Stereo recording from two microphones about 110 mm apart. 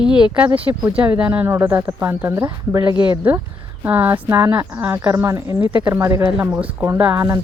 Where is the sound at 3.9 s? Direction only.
20° right (ahead or behind).